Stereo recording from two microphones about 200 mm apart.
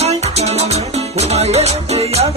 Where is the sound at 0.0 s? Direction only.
30° right (ahead or behind).